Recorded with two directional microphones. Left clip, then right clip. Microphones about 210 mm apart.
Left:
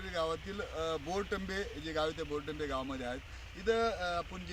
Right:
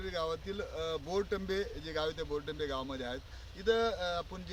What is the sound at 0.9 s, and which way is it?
Speech, 5° right (ahead or behind).